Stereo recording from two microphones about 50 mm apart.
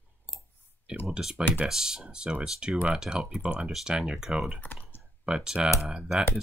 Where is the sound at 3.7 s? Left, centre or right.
Centre.